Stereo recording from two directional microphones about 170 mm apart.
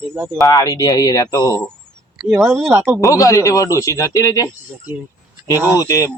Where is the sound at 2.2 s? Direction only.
5° right (ahead or behind).